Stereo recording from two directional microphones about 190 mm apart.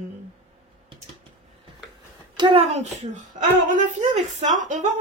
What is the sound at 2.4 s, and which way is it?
Speech, 30° right (ahead or behind).